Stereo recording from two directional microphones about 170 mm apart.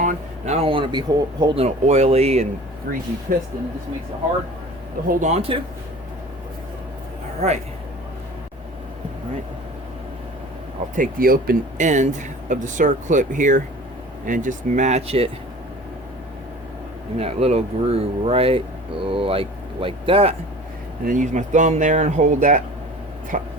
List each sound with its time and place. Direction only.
0.0 s speech: 45° right (ahead or behind); by 1.6 s 25° right (ahead or behind)
1.6 s speech: 40° right (ahead or behind)
2.9 s speech: 60° right (ahead or behind)
5.0 s speech: 55° right (ahead or behind)
5.3 s speech: 35° right (ahead or behind)
7.4 s speech: 40° right (ahead or behind)
10.9 s speech: 55° right (ahead or behind); by 15.3 s 35° right (ahead or behind)
17.2 s speech: 35° right (ahead or behind)
21.0 s speech: 50° right (ahead or behind)